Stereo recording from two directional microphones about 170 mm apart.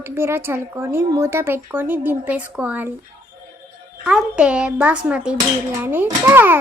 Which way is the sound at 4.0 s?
5° right (ahead or behind).